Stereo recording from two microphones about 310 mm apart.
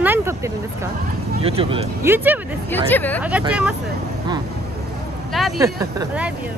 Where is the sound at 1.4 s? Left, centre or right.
Centre.